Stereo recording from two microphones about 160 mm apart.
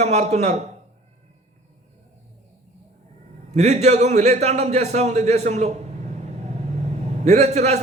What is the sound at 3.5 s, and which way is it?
A man's voice, 45° right (ahead or behind).